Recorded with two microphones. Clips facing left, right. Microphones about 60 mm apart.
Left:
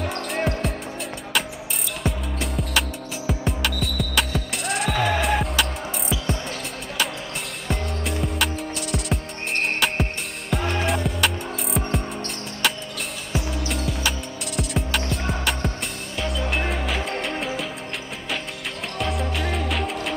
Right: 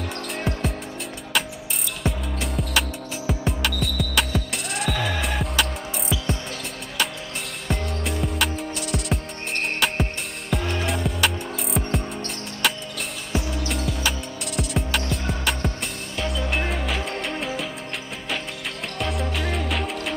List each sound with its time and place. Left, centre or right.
0.5 s music: centre
2.0 s music: centre
4.9 s music: left
5.2 s music: centre
7.6 s music: centre
10.5 s music: centre
18.9 s music: centre